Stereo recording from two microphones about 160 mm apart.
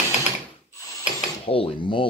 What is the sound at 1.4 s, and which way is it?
Speech, 35° left (ahead or behind).